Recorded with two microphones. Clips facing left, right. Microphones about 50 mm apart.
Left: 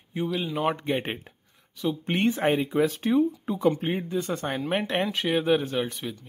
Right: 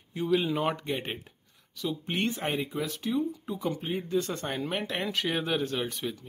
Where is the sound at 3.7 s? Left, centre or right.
Left.